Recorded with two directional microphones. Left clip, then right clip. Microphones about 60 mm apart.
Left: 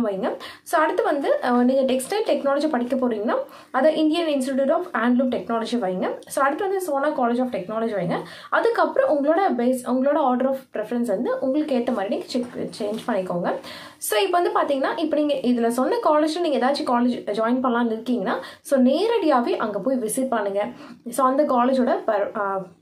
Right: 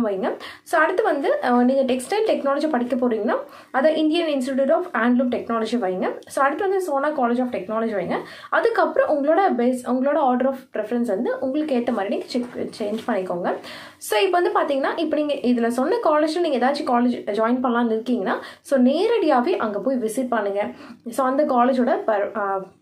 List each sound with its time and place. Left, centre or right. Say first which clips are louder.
0.0 s a woman's voice: right 1 dB; left